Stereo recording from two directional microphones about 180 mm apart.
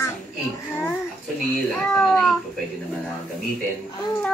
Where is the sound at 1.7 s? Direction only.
5° left (ahead or behind).